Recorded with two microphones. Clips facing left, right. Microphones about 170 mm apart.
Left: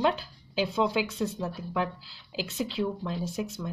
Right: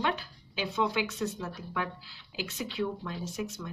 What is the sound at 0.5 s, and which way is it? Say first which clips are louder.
Speech: left 4 dB; 30° left (ahead or behind).